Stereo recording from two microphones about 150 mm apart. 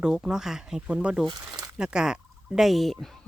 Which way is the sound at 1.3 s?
25° right (ahead or behind).